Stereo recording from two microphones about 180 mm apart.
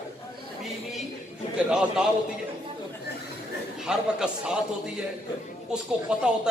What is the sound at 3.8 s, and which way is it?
Speech, 5° right (ahead or behind).